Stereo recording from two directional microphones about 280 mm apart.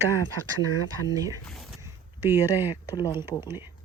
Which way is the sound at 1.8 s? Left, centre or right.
Centre.